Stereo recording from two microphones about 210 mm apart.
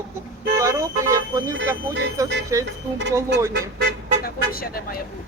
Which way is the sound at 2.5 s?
15° right (ahead or behind).